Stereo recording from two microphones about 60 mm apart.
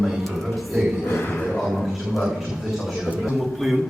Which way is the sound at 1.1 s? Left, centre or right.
Left.